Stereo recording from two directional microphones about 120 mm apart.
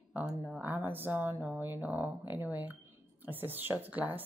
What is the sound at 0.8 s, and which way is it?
Speech, 15° right (ahead or behind).